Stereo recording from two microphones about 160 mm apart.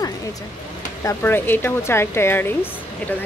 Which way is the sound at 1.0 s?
15° left (ahead or behind).